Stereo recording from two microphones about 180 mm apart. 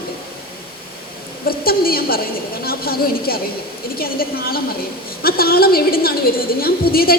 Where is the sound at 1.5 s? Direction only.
55° left (ahead or behind).